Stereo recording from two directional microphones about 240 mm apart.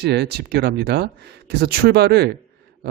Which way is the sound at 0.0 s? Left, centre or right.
Right.